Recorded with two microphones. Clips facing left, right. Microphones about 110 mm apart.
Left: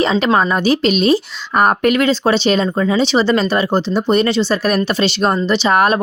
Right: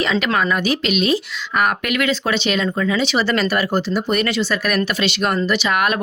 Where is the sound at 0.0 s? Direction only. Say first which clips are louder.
Left 5 dB; 30° left (ahead or behind).